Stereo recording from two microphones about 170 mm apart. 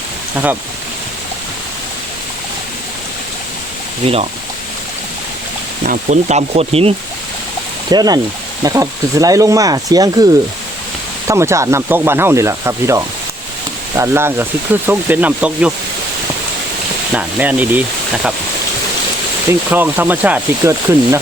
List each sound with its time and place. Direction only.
4.0 s speech: 35° right (ahead or behind)
5.8 s speech: 50° right (ahead or behind)
7.9 s speech: 20° right (ahead or behind)
11.3 s speech: 15° right (ahead or behind)
17.2 s speech: 10° right (ahead or behind)
19.5 s speech: 10° right (ahead or behind)